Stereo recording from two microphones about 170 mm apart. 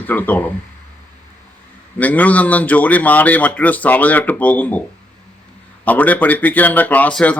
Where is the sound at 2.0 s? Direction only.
10° left (ahead or behind).